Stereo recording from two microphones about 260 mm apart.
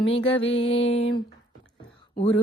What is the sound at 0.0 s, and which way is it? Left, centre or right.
Music, left.